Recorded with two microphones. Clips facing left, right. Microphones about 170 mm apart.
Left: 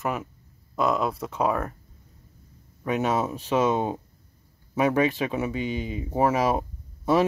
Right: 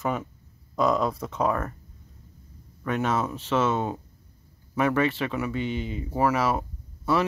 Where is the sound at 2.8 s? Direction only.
10° left (ahead or behind).